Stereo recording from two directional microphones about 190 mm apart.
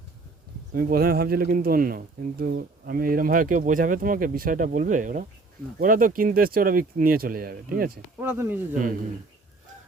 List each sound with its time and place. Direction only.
0.7 s speech: 50° right (ahead or behind)
8.2 s speech: 10° right (ahead or behind)